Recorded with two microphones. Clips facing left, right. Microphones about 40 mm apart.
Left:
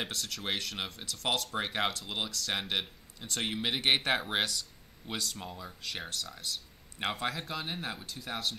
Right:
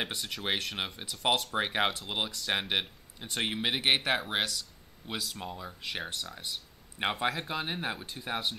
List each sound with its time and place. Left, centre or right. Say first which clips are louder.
0.0 s speech: right 2 dB; centre